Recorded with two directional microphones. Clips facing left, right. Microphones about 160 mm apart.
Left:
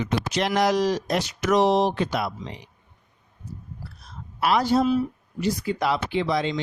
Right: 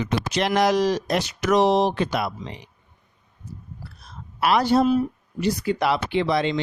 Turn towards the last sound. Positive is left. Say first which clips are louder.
# right 2 dB
turn(degrees=-65)  # may be behind; listen again after turning